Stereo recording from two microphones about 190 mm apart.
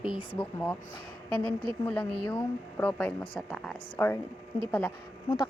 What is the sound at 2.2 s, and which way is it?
A woman's voice, 10° left (ahead or behind).